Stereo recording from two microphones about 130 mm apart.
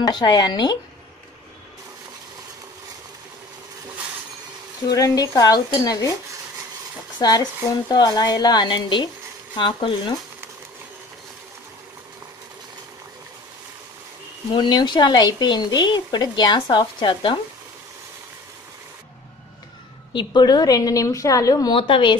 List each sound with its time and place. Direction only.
0.0 s speech: 35° left (ahead or behind)
4.8 s a woman's voice: 30° left (ahead or behind)
7.2 s speech: 30° left (ahead or behind)
14.5 s speech: 35° left (ahead or behind)
20.1 s a woman's voice: 35° left (ahead or behind)
21.7 s a woman's voice: 45° left (ahead or behind)